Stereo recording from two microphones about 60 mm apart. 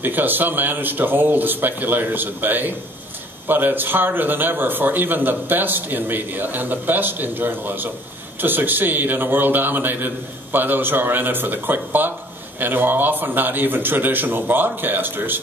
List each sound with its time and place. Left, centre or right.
0.0 s a man's voice: right